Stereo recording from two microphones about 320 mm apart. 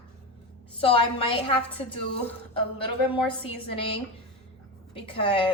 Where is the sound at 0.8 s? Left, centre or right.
Centre.